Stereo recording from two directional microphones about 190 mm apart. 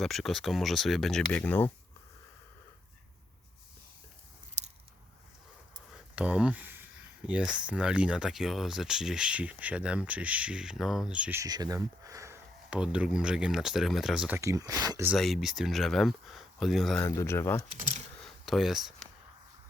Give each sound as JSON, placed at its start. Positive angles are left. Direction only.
{"t": 0.0, "sound": "speech", "side_deg": 0}
{"t": 4.6, "sound": "biting", "side_deg": -35}
{"t": 5.9, "sound": "a sound", "side_deg": -5}
{"t": 7.3, "sound": "speech", "side_deg": -5}
{"t": 15.0, "sound": "speech", "side_deg": 0}
{"t": 17.0, "sound": "speech", "side_deg": 15}
{"t": 17.7, "sound": "speech", "side_deg": -35}
{"t": 18.2, "sound": "a sound", "side_deg": 0}